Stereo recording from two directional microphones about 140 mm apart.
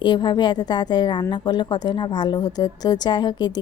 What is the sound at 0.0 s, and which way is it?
A woman's voice, 35° left (ahead or behind).